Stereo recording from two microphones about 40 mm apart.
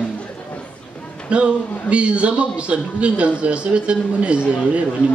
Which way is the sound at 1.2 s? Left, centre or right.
Right.